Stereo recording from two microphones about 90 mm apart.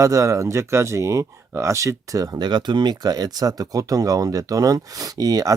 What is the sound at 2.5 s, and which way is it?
Speech, 55° right (ahead or behind).